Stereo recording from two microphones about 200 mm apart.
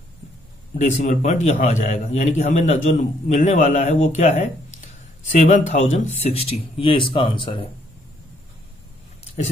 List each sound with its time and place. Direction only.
0.7 s speech: 35° left (ahead or behind)